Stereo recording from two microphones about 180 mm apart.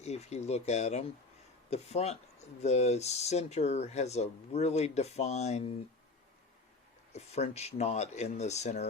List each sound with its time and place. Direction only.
0.0 s speech: 35° left (ahead or behind)
7.1 s speech: 40° left (ahead or behind)